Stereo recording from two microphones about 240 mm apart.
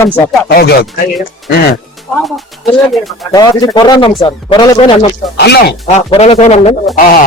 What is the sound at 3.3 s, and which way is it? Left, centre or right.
Speech, centre.